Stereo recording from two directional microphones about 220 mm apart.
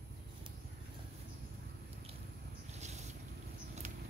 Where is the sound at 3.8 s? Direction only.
35° right (ahead or behind).